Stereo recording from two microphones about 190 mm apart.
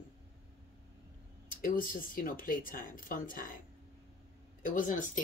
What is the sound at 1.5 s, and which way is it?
Speech, 45° left (ahead or behind).